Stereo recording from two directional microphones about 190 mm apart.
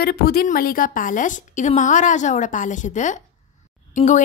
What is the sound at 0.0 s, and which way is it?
A woman's voice, 55° left (ahead or behind).